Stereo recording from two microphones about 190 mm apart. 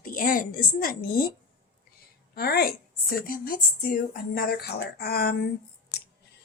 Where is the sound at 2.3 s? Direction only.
55° left (ahead or behind).